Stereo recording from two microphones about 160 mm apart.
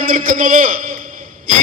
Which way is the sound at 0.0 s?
60° right (ahead or behind).